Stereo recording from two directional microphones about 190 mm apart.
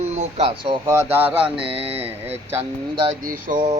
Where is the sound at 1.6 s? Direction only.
30° right (ahead or behind).